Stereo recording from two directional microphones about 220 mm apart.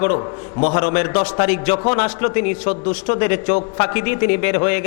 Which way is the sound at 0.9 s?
15° left (ahead or behind).